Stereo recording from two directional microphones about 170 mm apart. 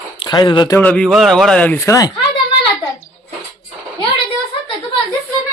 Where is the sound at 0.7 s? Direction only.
5° left (ahead or behind).